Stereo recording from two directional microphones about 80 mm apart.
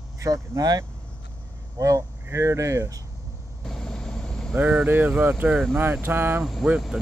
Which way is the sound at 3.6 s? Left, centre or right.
Centre.